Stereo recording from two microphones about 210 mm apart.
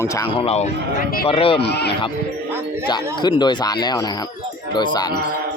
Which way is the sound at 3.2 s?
20° left (ahead or behind).